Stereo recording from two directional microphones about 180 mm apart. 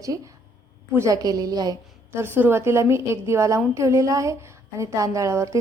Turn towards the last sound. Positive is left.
turn(degrees=-15)  # may be behind; listen again after turning